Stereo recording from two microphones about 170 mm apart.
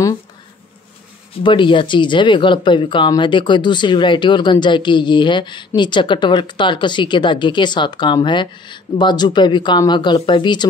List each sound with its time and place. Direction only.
1.4 s speech: 30° left (ahead or behind)